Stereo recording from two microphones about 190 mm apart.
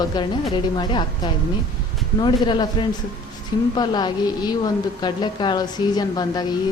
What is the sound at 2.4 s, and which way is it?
A woman's voice, 25° left (ahead or behind).